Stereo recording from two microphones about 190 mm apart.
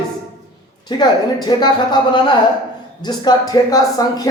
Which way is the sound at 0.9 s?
20° left (ahead or behind).